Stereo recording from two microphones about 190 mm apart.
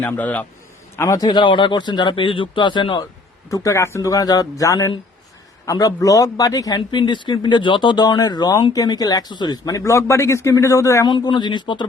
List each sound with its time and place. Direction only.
0.0 s a man's voice: 10° left (ahead or behind); by 11.9 s 25° left (ahead or behind)